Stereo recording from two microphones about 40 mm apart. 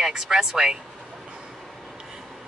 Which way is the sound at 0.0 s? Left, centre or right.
Centre.